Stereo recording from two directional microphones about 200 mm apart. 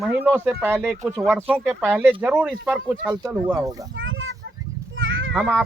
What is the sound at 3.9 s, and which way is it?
Children playing, 75° right (ahead or behind).